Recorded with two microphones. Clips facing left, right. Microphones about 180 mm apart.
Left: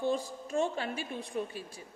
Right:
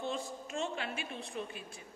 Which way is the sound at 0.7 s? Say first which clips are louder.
Left 4 dB; 40° left (ahead or behind).